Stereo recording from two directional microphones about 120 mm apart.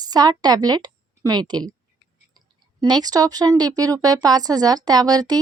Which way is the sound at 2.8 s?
35° right (ahead or behind).